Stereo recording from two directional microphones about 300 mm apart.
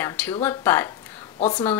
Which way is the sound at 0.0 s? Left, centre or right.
Centre.